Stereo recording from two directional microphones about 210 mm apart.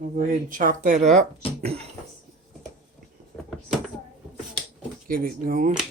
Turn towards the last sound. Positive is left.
turn(degrees=-40)  # may be behind; listen again after turning